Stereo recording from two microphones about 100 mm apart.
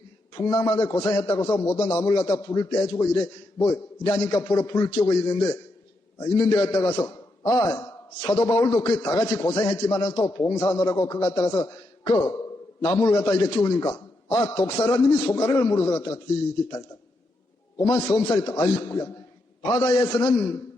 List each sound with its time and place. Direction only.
0.3 s a man's voice: 35° left (ahead or behind)
17.7 s a man's voice: 30° left (ahead or behind)